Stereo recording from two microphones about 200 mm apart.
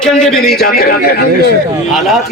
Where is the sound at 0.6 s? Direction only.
50° left (ahead or behind).